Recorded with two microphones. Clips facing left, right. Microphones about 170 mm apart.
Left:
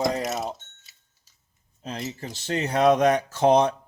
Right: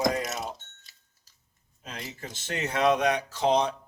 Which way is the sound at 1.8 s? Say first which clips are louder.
Left 7 dB; 30° left (ahead or behind).